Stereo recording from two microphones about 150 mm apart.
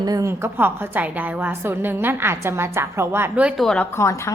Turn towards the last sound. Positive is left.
turn(degrees=20)  # may be behind; listen again after turning